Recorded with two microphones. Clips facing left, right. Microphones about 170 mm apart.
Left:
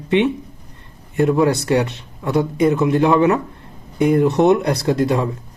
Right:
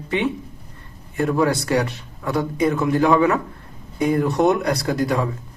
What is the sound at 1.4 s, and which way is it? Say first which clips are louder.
Speech: left 3 dB; 25° left (ahead or behind).